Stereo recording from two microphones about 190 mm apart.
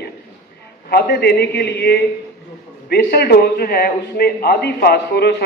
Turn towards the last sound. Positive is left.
turn(degrees=60)  # may be behind; listen again after turning